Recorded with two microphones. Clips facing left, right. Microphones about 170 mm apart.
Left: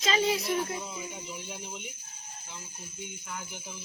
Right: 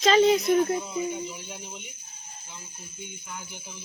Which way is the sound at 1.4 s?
5° left (ahead or behind).